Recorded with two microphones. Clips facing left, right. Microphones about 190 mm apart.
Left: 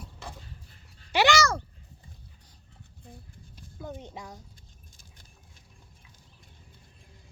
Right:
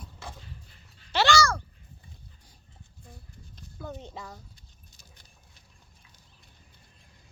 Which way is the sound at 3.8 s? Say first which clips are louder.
Even; 15° left (ahead or behind).